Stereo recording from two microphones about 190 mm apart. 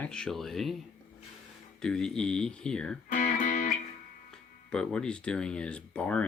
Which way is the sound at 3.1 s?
40° left (ahead or behind).